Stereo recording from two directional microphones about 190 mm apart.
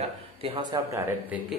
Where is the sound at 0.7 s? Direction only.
15° right (ahead or behind).